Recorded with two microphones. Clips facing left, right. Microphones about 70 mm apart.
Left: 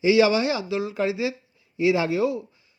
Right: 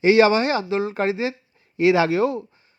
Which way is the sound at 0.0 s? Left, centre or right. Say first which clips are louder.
Right 3 dB; right.